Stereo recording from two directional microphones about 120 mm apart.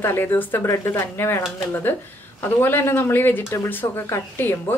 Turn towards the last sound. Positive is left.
turn(degrees=20)  # may be behind; listen again after turning